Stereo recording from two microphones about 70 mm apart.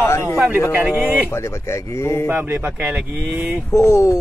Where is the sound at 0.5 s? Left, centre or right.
Right.